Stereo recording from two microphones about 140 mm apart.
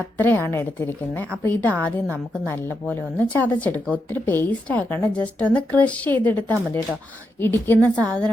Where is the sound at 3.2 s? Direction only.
10° left (ahead or behind).